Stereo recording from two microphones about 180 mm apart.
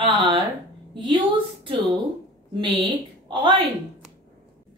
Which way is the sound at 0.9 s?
25° right (ahead or behind).